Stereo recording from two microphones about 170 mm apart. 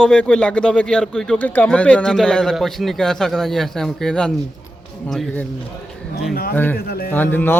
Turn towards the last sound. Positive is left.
turn(degrees=10)  # may be behind; listen again after turning